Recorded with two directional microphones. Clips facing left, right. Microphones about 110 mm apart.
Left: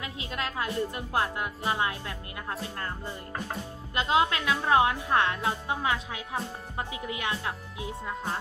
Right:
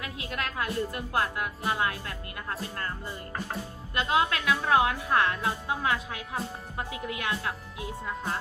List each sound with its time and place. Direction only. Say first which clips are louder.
0.0 s a woman's voice: even; 20° left (ahead or behind)
3.9 s a woman's voice: left 1 dB; 20° left (ahead or behind)